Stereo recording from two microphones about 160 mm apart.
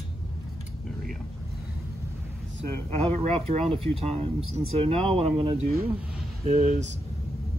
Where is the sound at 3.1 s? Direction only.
45° right (ahead or behind).